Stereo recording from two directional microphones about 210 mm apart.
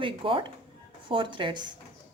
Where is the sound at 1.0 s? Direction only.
25° right (ahead or behind).